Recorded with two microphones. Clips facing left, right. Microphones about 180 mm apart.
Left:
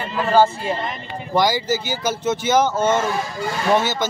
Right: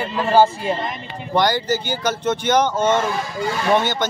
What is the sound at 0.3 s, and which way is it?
Speech, 15° right (ahead or behind).